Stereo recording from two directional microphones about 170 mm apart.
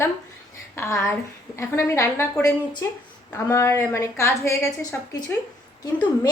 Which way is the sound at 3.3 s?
15° left (ahead or behind).